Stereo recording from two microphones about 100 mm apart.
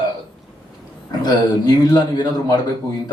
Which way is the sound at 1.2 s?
45° left (ahead or behind).